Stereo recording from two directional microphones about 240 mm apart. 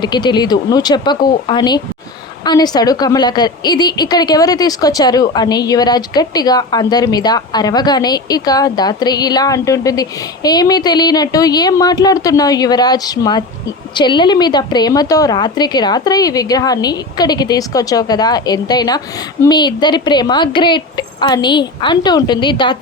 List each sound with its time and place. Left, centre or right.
0.0 s a woman's voice: centre